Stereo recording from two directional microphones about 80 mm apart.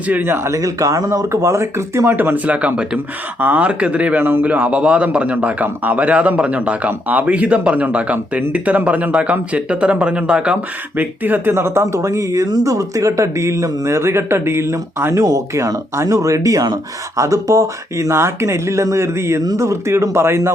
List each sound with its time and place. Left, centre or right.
0.1 s speech: right
2.1 s a man's voice: right
11.5 s speech: right